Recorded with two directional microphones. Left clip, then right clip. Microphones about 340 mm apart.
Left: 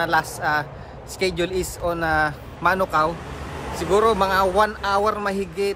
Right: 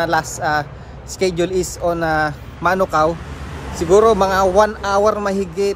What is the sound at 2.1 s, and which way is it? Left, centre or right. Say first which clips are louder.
Speech: right 3 dB; centre.